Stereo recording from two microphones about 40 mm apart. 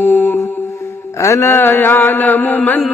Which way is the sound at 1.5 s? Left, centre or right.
Left.